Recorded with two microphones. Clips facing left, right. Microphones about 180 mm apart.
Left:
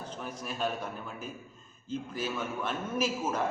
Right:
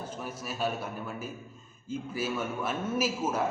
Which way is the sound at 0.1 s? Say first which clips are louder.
Right 1 dB; 5° right (ahead or behind).